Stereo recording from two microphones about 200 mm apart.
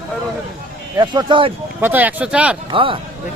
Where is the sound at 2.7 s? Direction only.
25° right (ahead or behind).